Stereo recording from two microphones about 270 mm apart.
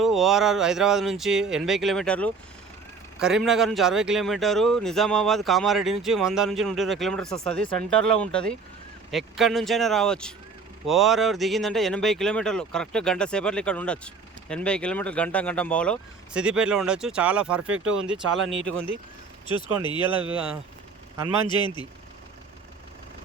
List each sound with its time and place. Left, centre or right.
0.0 s speech: centre
17.9 s speech: right
19.5 s speech: centre
21.4 s speech: centre